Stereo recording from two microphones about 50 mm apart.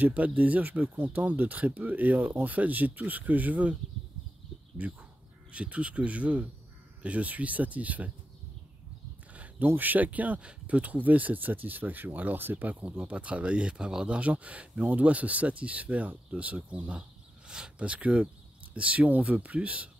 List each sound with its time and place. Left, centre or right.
0.0 s speech: right
4.8 s speech: right
9.3 s a sound: right
9.8 s speech: right